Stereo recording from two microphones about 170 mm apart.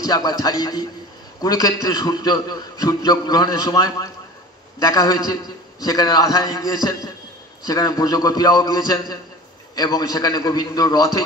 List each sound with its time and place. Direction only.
0.0 s a man's voice: 20° left (ahead or behind)